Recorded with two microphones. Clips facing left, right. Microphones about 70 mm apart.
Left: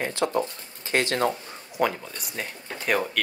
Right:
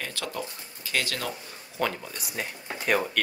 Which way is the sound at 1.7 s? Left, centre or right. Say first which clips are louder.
Left 4 dB; centre.